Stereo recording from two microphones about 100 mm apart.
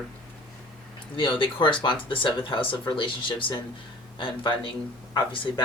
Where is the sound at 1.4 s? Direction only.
55° left (ahead or behind).